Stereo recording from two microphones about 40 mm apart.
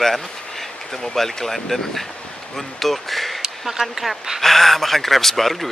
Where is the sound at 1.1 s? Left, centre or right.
Centre.